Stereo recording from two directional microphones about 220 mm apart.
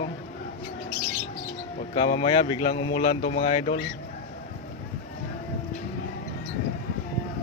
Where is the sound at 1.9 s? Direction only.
30° left (ahead or behind).